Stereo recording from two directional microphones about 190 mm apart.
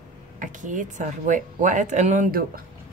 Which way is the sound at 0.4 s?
40° right (ahead or behind).